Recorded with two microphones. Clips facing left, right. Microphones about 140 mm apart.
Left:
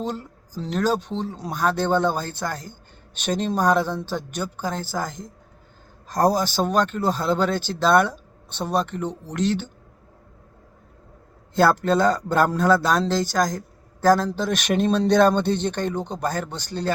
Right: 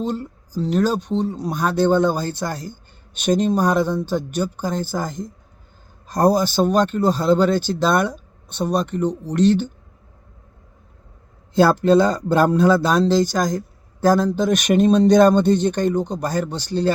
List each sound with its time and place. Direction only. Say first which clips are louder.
0.5 s speech: right 3 dB; 10° right (ahead or behind)
11.5 s speech: right 4 dB; 15° right (ahead or behind)
16.0 s speech: right 6 dB; 25° left (ahead or behind)
16.3 s speech: right 6 dB; 15° right (ahead or behind)